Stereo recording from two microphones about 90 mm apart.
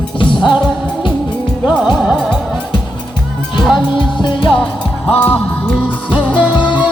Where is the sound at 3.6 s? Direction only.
5° right (ahead or behind).